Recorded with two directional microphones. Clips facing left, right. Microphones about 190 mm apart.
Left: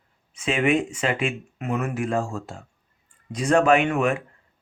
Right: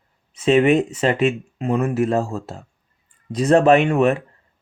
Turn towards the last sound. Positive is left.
turn(degrees=-35)  # may be behind; listen again after turning